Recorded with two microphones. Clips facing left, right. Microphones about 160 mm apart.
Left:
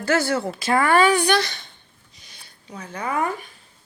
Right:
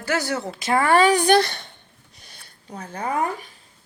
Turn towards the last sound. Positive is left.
turn(degrees=-45)  # may be behind; listen again after turning